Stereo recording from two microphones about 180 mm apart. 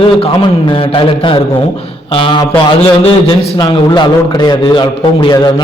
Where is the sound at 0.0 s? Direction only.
30° left (ahead or behind).